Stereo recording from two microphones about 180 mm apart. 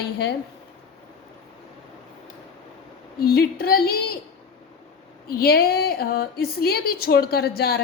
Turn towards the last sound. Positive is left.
turn(degrees=60)  # may be behind; listen again after turning